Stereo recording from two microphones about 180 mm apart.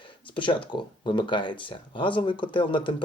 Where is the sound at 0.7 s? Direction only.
25° left (ahead or behind).